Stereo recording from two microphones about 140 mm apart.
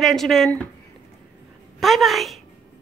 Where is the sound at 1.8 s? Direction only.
Centre (ahead or behind).